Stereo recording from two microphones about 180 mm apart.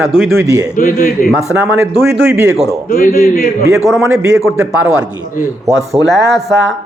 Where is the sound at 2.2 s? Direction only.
15° right (ahead or behind).